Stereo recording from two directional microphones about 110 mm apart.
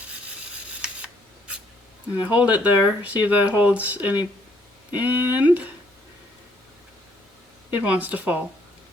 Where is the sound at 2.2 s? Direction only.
15° right (ahead or behind).